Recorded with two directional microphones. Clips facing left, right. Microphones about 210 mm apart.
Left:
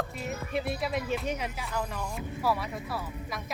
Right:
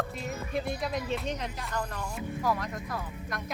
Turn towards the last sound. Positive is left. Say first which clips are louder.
# left 1 dB
turn(degrees=5)  # may be behind; listen again after turning